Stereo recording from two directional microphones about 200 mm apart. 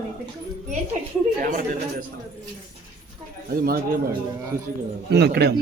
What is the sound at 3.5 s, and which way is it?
Speech, 45° right (ahead or behind).